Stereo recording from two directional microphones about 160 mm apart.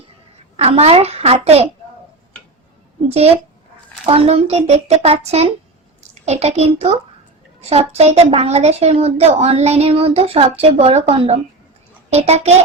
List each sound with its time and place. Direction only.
0.5 s a woman's voice: 40° right (ahead or behind)
4.0 s a woman's voice: 40° right (ahead or behind)